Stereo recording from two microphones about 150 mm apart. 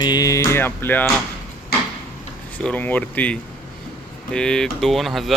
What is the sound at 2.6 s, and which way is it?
Speech, 10° left (ahead or behind).